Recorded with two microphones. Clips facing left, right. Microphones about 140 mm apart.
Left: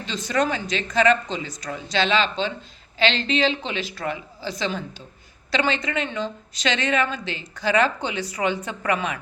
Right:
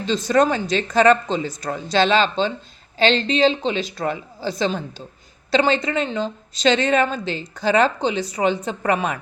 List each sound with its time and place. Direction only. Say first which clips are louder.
0.3 s a woman's voice: right 5 dB; 35° right (ahead or behind)